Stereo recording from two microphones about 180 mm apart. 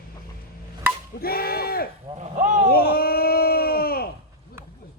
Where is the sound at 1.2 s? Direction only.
55° left (ahead or behind).